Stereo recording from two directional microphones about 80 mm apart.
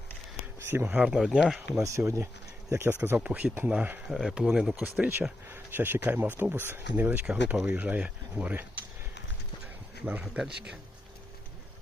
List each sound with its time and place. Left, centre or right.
0.6 s a sound: right
0.9 s speech: centre
1.7 s speech: right
3.2 s speech: centre
4.1 s speech: centre
4.8 s speech: right
7.3 s speech: centre
10.3 s speech: centre